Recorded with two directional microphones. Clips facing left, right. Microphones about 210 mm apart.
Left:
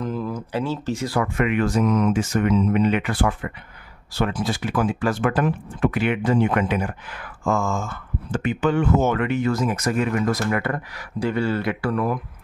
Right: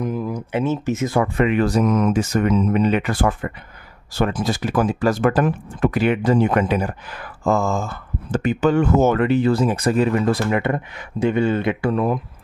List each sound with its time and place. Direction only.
0.0 s speech: 15° right (ahead or behind)